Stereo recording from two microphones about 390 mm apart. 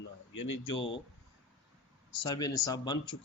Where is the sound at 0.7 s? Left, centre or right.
Left.